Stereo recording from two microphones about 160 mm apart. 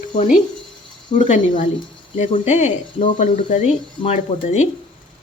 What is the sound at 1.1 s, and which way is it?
Speech, 50° left (ahead or behind).